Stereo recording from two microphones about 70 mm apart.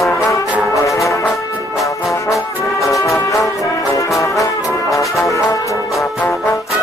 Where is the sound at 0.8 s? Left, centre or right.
Left.